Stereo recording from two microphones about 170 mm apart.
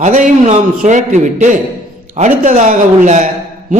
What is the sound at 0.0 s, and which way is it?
A man's voice, 45° right (ahead or behind).